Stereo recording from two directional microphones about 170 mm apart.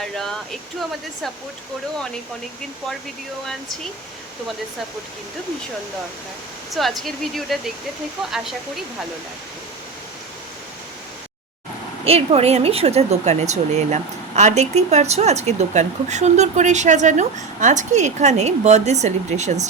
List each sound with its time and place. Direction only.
6.7 s speech: centre (ahead or behind)
12.0 s speech: 35° right (ahead or behind)